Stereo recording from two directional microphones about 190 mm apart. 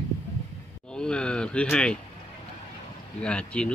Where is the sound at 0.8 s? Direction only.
5° left (ahead or behind).